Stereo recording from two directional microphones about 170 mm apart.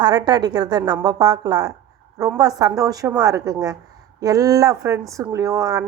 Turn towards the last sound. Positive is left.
turn(degrees=-20)  # may be behind; listen again after turning